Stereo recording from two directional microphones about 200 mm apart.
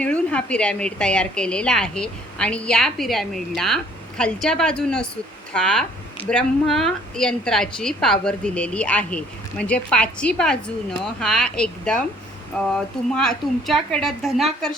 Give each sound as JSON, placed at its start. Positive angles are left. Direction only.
{"t": 0.0, "sound": "a woman's voice", "side_deg": 5}